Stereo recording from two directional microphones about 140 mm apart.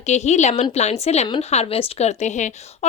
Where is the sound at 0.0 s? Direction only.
55° left (ahead or behind).